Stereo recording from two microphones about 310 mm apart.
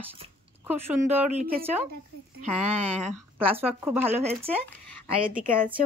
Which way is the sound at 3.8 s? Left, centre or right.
Centre.